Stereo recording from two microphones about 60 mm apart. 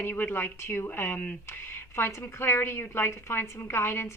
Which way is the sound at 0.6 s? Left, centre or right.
Left.